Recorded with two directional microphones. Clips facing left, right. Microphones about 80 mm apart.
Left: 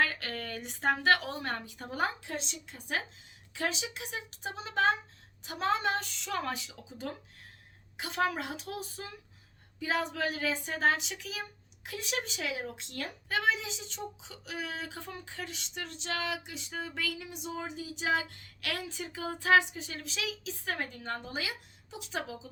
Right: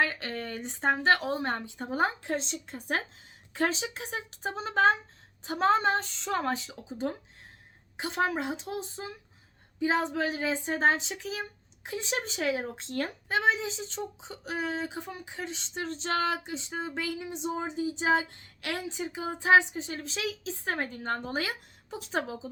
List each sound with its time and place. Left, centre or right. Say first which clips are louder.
0.0 s a woman's voice: right 2 dB; right